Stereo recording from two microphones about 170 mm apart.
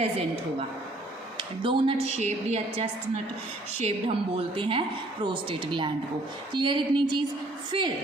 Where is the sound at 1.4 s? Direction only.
30° right (ahead or behind).